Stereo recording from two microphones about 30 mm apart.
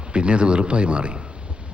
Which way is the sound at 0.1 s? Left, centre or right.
Right.